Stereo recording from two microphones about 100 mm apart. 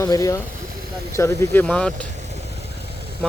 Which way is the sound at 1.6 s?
10° left (ahead or behind).